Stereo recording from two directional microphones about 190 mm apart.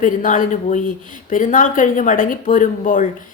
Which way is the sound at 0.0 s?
45° left (ahead or behind).